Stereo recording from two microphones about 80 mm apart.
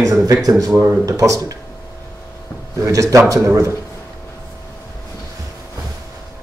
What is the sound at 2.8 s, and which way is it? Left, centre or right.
Speech, right.